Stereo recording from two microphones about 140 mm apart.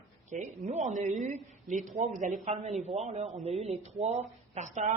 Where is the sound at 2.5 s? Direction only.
50° right (ahead or behind).